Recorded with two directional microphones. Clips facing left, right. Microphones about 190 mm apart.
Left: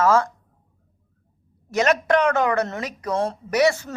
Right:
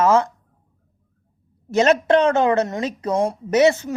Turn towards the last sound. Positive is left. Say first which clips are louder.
# right 4 dB
turn(degrees=-20)  # may be behind; listen again after turning